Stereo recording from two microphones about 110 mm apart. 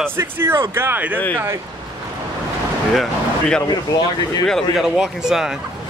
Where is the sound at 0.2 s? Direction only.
20° right (ahead or behind).